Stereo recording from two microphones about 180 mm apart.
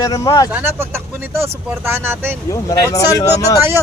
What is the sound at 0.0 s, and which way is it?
Speech, 20° left (ahead or behind).